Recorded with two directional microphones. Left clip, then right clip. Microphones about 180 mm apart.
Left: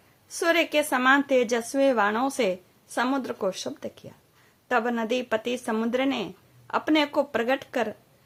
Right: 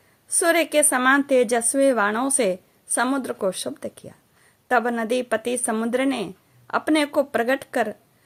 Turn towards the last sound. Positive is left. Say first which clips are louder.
# right 4 dB
turn(degrees=-20)  # may be behind; listen again after turning